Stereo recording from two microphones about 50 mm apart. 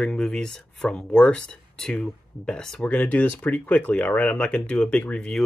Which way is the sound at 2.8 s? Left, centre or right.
Left.